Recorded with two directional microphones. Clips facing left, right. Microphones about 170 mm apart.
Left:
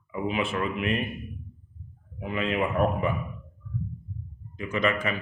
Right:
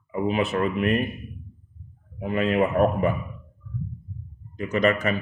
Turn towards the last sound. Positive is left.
turn(degrees=-40)  # may be behind; listen again after turning